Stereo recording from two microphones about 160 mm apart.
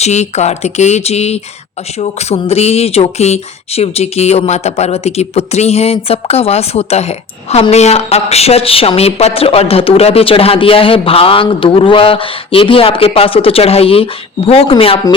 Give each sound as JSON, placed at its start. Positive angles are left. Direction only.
{"t": 0.0, "sound": "speech", "side_deg": 45}